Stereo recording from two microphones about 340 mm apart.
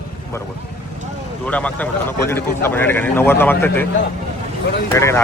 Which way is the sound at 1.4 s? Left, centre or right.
Centre.